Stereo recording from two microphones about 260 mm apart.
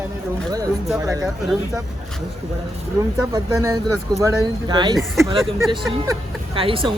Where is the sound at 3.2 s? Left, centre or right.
Centre.